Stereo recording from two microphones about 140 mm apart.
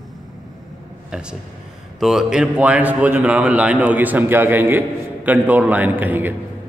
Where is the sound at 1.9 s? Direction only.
5° right (ahead or behind).